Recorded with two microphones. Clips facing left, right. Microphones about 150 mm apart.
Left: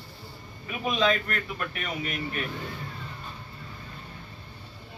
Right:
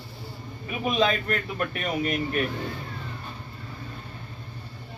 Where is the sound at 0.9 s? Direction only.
35° right (ahead or behind).